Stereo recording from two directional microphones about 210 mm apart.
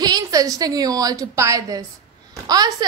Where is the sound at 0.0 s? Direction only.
20° right (ahead or behind).